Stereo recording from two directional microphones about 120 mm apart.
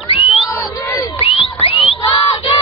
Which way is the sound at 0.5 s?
30° left (ahead or behind).